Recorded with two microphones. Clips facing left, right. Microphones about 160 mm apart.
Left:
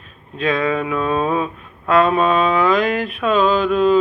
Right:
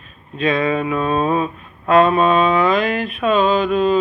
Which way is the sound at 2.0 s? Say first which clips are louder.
Right 1 dB; centre (ahead or behind).